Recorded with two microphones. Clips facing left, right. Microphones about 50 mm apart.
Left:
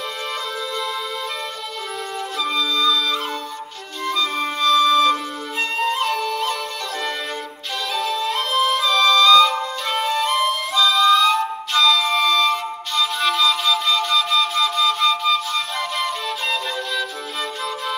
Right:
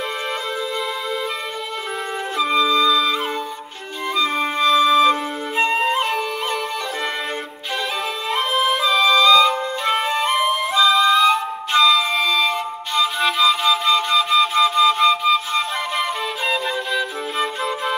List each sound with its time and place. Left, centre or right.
2.3 s flute: right
4.1 s music: centre
5.8 s flute: centre
8.0 s music: centre
10.7 s flute: right
11.1 s music: centre